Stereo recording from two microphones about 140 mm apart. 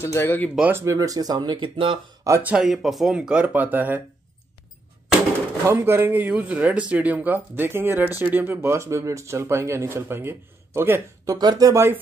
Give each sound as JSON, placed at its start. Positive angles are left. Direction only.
{"t": 0.0, "sound": "speech", "side_deg": 20}
{"t": 0.6, "sound": "speech", "side_deg": -15}
{"t": 2.2, "sound": "speech", "side_deg": -20}
{"t": 2.5, "sound": "speech", "side_deg": -5}
{"t": 5.7, "sound": "speech", "side_deg": -20}